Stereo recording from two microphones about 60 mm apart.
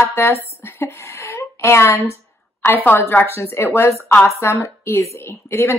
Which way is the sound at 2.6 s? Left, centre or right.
Left.